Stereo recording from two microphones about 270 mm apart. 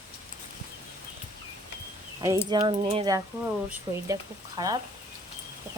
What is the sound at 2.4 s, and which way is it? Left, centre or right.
Speech, centre.